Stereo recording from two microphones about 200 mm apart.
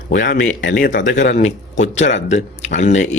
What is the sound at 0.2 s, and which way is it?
Speech, 40° left (ahead or behind).